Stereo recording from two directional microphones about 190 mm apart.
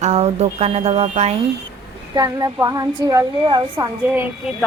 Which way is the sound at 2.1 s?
20° right (ahead or behind).